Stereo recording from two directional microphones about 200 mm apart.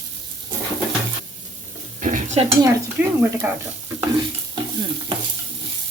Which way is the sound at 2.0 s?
40° right (ahead or behind).